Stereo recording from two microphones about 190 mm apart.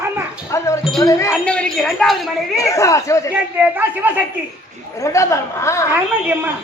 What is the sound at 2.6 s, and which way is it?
Speech, 15° left (ahead or behind).